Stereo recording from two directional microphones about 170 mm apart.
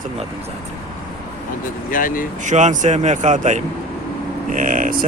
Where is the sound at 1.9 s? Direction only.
55° left (ahead or behind).